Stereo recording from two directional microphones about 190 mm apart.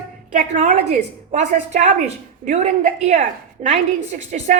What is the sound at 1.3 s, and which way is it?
A woman's voice, 35° right (ahead or behind).